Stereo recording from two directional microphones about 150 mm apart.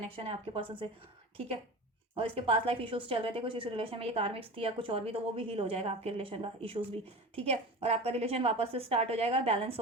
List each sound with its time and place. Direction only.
0.2 s a woman's voice: 35° right (ahead or behind)
2.1 s a woman's voice: 35° right (ahead or behind)